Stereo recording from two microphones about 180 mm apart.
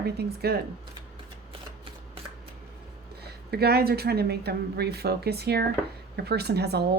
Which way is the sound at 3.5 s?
65° right (ahead or behind).